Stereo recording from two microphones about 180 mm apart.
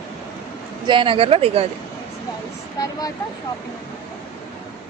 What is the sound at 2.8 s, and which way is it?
Speech, 20° left (ahead or behind).